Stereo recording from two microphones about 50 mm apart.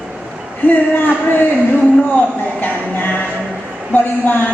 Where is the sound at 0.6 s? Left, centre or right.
Left.